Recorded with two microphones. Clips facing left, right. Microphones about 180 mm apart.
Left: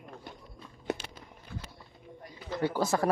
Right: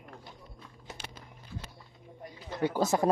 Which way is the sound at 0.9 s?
65° left (ahead or behind).